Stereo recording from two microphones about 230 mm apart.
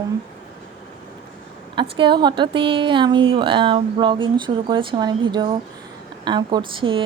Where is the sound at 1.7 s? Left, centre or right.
Right.